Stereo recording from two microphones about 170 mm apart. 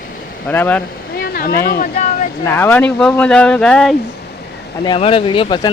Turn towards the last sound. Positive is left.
turn(degrees=30)  # may be behind; listen again after turning